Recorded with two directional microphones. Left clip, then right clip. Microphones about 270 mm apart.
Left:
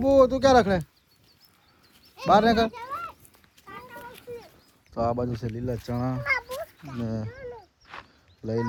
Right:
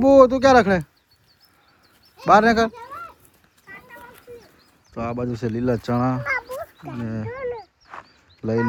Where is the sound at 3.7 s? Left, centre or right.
Left.